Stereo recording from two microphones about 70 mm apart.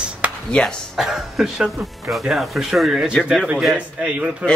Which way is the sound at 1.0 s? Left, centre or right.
Centre.